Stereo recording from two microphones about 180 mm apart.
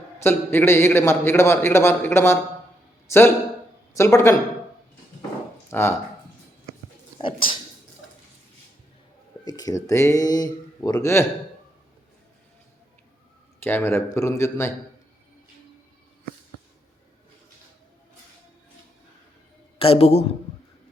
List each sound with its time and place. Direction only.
0.2 s a man's voice: 15° left (ahead or behind)
5.7 s a man's voice: 10° left (ahead or behind)
7.2 s speech: 30° left (ahead or behind)
9.4 s speech: 20° left (ahead or behind)
13.7 s a man's voice: 10° left (ahead or behind)
19.8 s a man's voice: 35° left (ahead or behind)